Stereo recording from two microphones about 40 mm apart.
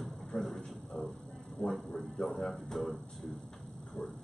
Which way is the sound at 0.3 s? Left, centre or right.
Centre.